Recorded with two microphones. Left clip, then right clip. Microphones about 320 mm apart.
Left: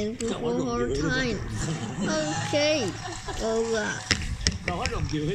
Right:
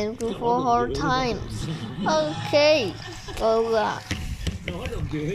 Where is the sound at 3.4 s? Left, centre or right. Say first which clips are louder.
Right 6 dB; right.